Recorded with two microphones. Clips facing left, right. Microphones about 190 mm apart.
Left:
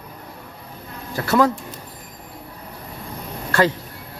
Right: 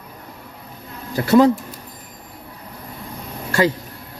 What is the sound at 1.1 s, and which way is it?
Speech, 20° right (ahead or behind).